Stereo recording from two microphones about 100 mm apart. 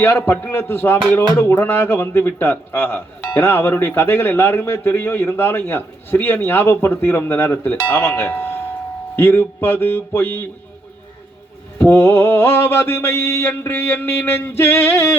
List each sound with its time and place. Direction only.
0.0 s a man's voice: 20° left (ahead or behind)
11.8 s a man's voice: 20° left (ahead or behind)